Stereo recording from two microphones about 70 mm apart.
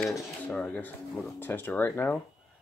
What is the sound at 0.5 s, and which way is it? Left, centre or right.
Speech, left.